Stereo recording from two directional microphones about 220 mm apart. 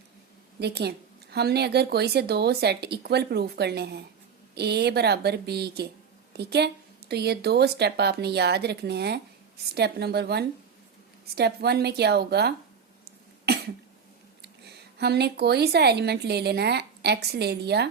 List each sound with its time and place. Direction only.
0.6 s a woman's voice: 50° right (ahead or behind)
14.4 s speech: 50° right (ahead or behind)